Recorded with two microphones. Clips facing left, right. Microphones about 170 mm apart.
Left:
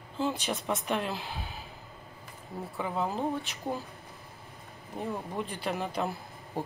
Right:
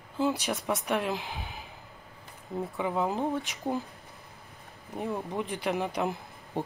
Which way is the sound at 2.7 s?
15° right (ahead or behind).